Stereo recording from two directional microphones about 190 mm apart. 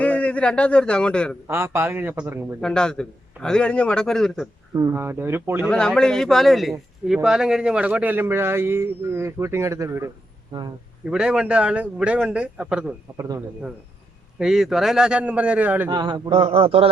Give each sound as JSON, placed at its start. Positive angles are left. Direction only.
{"t": 0.0, "sound": "a man's voice", "side_deg": 5}
{"t": 1.5, "sound": "a man's voice", "side_deg": -10}
{"t": 2.6, "sound": "a man's voice", "side_deg": 5}
{"t": 4.7, "sound": "a man's voice", "side_deg": -15}
{"t": 5.6, "sound": "a man's voice", "side_deg": 5}
{"t": 11.1, "sound": "a man's voice", "side_deg": -5}
{"t": 13.1, "sound": "a man's voice", "side_deg": -20}
{"t": 14.3, "sound": "a man's voice", "side_deg": -5}
{"t": 15.9, "sound": "a man's voice", "side_deg": -20}